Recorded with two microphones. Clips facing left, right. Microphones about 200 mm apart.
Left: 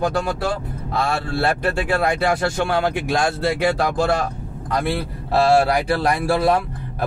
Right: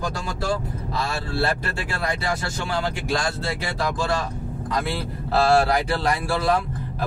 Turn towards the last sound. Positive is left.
turn(degrees=55)  # may be behind; listen again after turning